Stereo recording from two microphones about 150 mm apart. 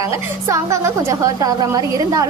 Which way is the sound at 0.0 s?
20° right (ahead or behind).